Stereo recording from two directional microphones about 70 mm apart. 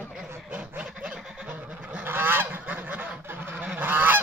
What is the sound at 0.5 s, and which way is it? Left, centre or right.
Fowl, centre.